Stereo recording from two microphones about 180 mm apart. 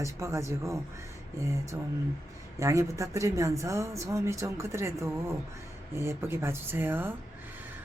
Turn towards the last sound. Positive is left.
turn(degrees=-10)  # may be behind; listen again after turning